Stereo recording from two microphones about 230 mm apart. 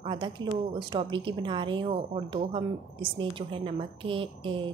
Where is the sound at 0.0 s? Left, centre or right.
Right.